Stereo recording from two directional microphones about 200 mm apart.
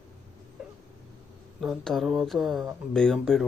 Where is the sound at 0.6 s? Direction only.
5° right (ahead or behind).